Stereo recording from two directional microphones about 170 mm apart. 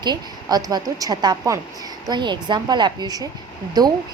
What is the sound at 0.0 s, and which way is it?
A woman's voice, 25° right (ahead or behind).